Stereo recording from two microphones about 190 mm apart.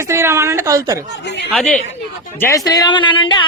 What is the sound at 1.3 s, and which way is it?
Speech, 65° left (ahead or behind).